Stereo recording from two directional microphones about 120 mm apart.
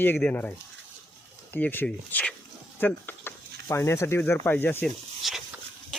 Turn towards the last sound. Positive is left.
turn(degrees=0)  # may be behind; listen again after turning